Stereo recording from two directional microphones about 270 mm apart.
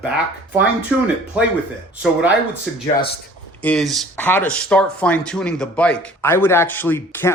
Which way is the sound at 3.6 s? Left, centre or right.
Centre.